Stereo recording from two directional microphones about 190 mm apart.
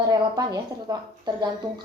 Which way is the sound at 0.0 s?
20° right (ahead or behind).